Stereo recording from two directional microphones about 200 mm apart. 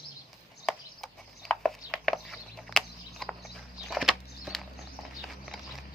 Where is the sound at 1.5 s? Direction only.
5° left (ahead or behind).